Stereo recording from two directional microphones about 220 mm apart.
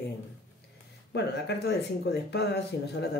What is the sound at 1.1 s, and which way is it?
Speech, 50° left (ahead or behind).